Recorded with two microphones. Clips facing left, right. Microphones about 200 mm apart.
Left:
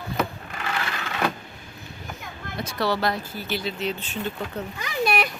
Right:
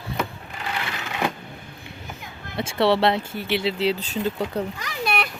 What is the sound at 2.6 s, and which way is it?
Speech, 25° right (ahead or behind).